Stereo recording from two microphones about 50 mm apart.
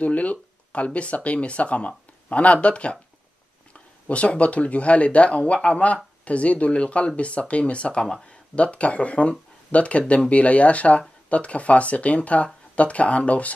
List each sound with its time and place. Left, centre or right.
0.0 s speech: left
4.1 s speech: left